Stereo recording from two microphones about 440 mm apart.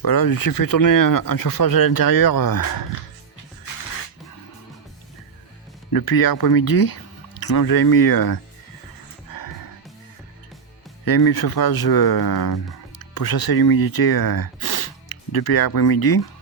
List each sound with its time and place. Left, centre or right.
0.0 s speech: left
5.9 s speech: left
9.3 s music: left
11.0 s speech: left